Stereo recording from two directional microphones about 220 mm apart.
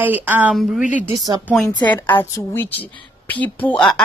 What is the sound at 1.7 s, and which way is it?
A woman's voice, 20° left (ahead or behind).